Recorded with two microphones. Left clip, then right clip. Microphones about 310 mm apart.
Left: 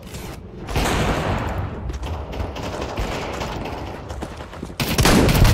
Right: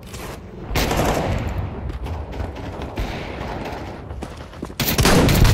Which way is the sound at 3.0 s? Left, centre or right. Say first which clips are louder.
Left 3 dB; centre.